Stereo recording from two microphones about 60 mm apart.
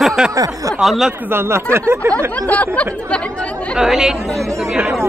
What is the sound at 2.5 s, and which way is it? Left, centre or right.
Speech, left.